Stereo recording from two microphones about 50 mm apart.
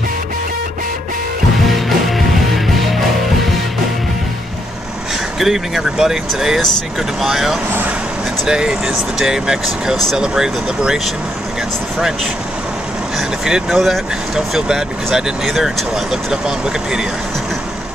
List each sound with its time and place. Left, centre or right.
1.7 s music: centre
5.4 s speech: centre
13.5 s speech: centre